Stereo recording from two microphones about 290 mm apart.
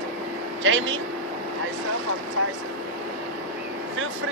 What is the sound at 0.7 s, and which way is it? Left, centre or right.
Speech, right.